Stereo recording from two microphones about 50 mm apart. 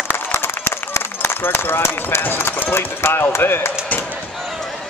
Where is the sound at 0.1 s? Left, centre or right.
Left.